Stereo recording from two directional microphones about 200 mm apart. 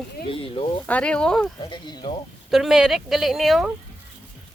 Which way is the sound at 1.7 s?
25° left (ahead or behind).